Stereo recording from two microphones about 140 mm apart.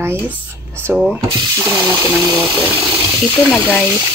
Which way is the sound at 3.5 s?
15° left (ahead or behind).